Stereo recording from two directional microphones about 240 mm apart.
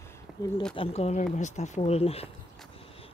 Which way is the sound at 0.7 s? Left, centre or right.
Left.